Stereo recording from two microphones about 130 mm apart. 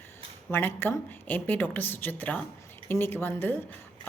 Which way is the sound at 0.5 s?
15° left (ahead or behind).